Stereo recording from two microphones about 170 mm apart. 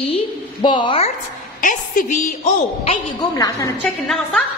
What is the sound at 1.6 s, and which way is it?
A woman's voice, 50° left (ahead or behind).